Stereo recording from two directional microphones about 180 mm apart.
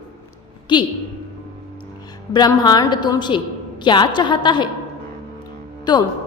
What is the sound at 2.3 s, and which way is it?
A woman's voice, 20° left (ahead or behind).